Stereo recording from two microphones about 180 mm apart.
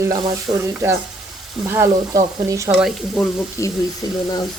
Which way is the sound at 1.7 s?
15° right (ahead or behind).